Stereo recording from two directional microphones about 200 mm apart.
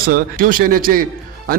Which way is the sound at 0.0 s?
45° right (ahead or behind).